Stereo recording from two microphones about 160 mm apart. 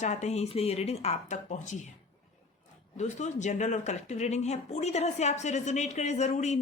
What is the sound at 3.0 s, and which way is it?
Speech, 50° left (ahead or behind).